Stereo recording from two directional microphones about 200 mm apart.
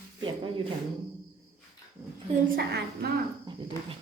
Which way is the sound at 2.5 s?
50° right (ahead or behind).